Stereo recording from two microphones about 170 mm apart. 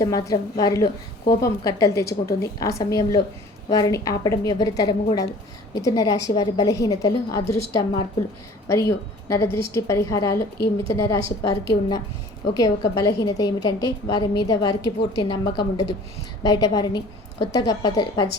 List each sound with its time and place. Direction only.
0.0 s a woman's voice: 20° left (ahead or behind)
12.5 s a woman's voice: 20° left (ahead or behind)